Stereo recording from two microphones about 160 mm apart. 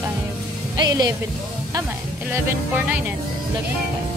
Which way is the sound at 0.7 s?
25° right (ahead or behind).